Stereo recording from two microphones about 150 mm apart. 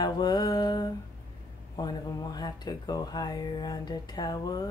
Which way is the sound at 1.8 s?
25° left (ahead or behind).